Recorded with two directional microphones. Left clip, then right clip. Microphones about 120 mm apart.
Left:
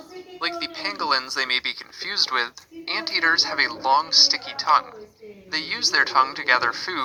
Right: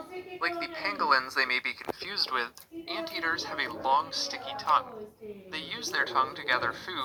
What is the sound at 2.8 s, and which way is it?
Speech, 45° left (ahead or behind).